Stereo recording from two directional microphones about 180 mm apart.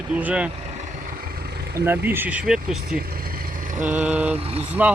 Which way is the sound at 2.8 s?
55° right (ahead or behind).